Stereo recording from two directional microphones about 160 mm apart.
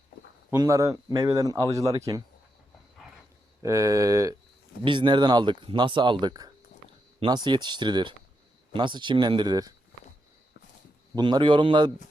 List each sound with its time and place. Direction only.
0.1 s a sound: 70° left (ahead or behind)
0.5 s speech: 20° right (ahead or behind)
3.6 s speech: 20° right (ahead or behind)
11.1 s speech: 25° right (ahead or behind)